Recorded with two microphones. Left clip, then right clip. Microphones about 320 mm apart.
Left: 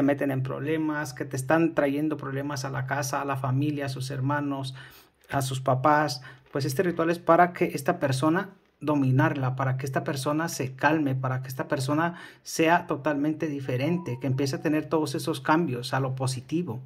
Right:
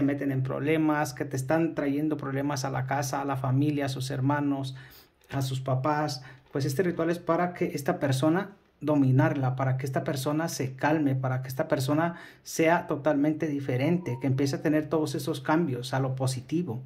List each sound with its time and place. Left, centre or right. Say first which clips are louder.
0.0 s speech: left 4 dB; centre